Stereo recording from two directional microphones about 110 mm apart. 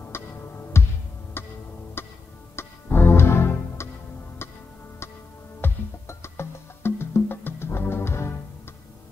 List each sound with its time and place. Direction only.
0.1 s music: 20° left (ahead or behind)
5.6 s music: 25° left (ahead or behind)